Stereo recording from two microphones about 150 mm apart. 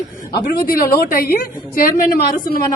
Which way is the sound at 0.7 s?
70° left (ahead or behind).